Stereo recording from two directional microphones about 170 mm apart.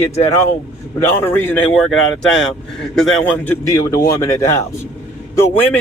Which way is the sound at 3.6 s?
20° left (ahead or behind).